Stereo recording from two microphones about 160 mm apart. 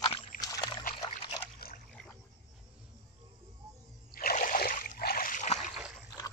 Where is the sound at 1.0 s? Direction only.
30° left (ahead or behind).